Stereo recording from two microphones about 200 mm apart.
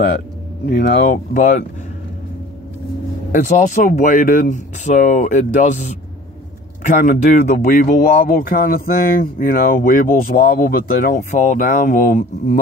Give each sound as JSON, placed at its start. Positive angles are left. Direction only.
{"t": 0.7, "sound": "speech", "side_deg": 50}
{"t": 3.3, "sound": "speech", "side_deg": 40}
{"t": 6.9, "sound": "speech", "side_deg": 40}